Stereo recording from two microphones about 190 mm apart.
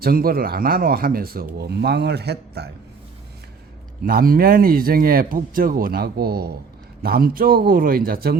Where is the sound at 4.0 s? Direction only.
50° right (ahead or behind).